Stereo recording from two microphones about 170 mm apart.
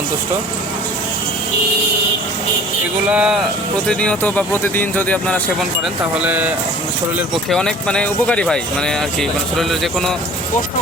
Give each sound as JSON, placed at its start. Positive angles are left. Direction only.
{"t": 3.1, "sound": "speech", "side_deg": -5}
{"t": 3.8, "sound": "speech", "side_deg": 5}
{"t": 6.1, "sound": "speech", "side_deg": -10}
{"t": 7.5, "sound": "speech", "side_deg": 5}